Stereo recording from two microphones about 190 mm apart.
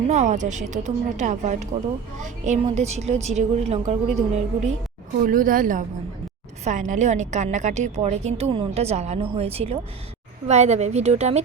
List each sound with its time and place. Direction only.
0.1 s a woman's voice: 40° right (ahead or behind)